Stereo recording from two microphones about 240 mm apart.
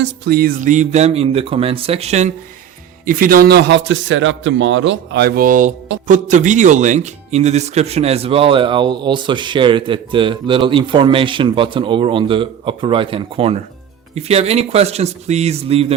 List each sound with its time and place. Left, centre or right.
0.0 s a man's voice: right